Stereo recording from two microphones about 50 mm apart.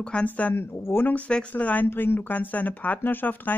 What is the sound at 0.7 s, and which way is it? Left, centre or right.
Speech, left.